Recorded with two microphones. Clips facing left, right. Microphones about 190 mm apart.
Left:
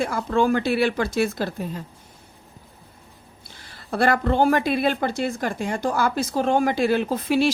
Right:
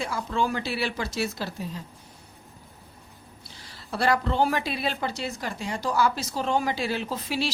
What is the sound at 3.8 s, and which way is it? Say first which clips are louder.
A woman's voice: left 4 dB; 55° left (ahead or behind).